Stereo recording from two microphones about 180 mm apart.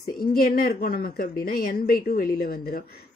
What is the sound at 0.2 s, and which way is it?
A woman's voice, 55° left (ahead or behind).